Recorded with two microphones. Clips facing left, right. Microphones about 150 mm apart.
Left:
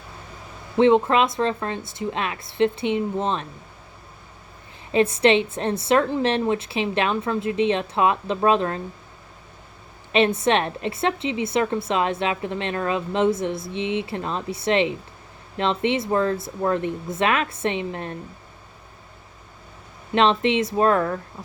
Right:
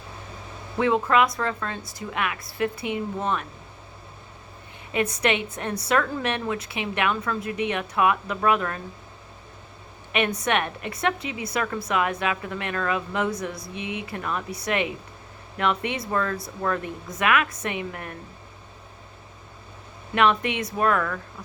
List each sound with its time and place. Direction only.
0.8 s a woman's voice: 25° left (ahead or behind)
4.9 s a woman's voice: 30° left (ahead or behind)
10.1 s a woman's voice: 25° left (ahead or behind)
20.1 s a woman's voice: 25° left (ahead or behind)